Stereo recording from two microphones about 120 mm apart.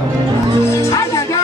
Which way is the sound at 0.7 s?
25° left (ahead or behind).